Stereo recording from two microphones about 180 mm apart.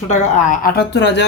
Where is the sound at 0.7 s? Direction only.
70° left (ahead or behind).